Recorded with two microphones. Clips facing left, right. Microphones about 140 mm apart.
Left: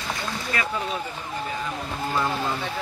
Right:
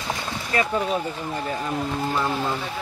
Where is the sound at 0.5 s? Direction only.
30° right (ahead or behind).